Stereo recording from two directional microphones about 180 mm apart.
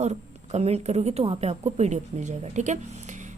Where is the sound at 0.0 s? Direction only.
40° right (ahead or behind).